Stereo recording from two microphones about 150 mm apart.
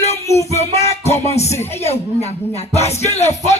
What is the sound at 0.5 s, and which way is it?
Music, 45° left (ahead or behind).